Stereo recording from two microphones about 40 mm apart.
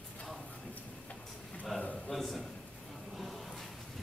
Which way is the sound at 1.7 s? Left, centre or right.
Centre.